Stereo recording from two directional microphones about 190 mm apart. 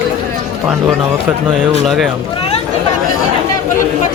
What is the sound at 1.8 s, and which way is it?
Speech, centre (ahead or behind).